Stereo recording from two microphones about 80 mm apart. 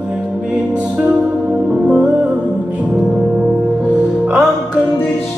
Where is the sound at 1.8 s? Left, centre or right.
Centre.